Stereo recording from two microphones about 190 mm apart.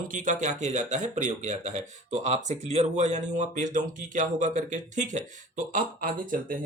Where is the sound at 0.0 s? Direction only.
45° right (ahead or behind).